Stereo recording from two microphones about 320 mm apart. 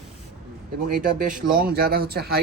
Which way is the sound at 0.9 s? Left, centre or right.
Right.